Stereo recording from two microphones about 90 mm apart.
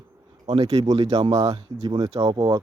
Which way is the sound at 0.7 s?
45° right (ahead or behind).